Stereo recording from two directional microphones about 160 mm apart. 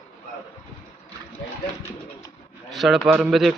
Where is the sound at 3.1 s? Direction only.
5° right (ahead or behind).